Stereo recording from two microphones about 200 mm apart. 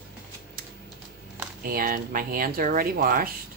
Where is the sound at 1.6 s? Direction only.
45° right (ahead or behind).